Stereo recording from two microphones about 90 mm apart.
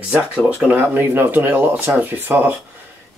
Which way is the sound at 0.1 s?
15° right (ahead or behind).